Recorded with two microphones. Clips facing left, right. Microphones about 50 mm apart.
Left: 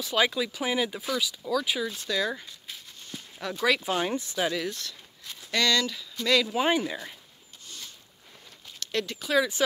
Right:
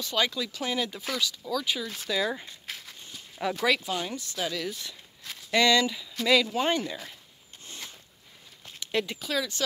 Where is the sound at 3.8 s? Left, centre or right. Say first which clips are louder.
Left 4 dB; left.